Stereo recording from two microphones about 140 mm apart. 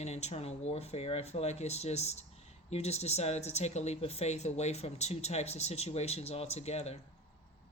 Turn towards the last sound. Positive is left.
turn(degrees=50)  # may be behind; listen again after turning